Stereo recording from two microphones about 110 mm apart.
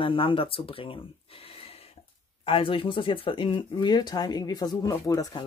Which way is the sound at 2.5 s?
55° left (ahead or behind).